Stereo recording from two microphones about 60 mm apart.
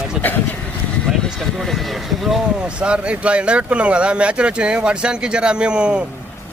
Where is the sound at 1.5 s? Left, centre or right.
Centre.